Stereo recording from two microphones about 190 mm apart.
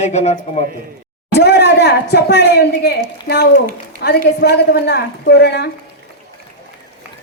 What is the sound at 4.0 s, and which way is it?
A woman's voice, 55° left (ahead or behind).